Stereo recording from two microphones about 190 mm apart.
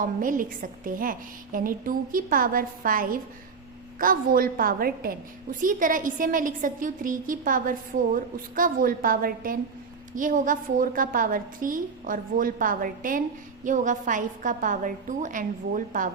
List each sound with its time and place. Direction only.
0.0 s a woman's voice: 45° right (ahead or behind)